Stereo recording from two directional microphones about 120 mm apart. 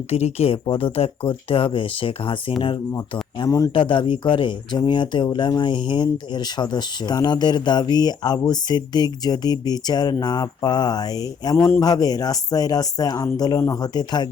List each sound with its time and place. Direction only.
0.1 s speech: 60° left (ahead or behind)
3.4 s speech: 30° left (ahead or behind)
3.8 s speech: 45° left (ahead or behind)